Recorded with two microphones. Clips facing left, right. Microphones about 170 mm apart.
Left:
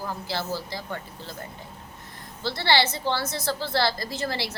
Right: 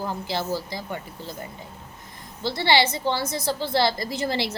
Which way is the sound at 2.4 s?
15° right (ahead or behind).